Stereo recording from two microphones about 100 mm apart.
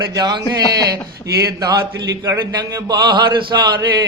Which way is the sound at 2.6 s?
40° right (ahead or behind).